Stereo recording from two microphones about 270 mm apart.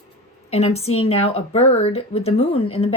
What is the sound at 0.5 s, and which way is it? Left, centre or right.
Speech, left.